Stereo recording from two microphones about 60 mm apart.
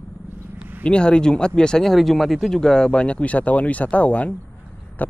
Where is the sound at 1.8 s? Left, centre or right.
Centre.